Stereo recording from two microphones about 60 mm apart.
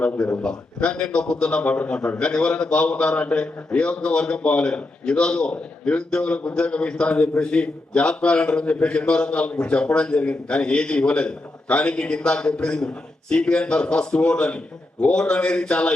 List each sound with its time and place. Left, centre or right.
0.4 s a man's voice: centre